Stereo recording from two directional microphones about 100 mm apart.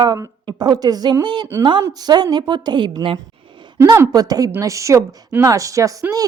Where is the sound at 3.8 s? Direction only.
35° right (ahead or behind).